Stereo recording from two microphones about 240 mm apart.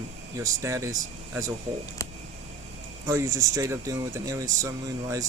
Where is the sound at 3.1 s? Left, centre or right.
Centre.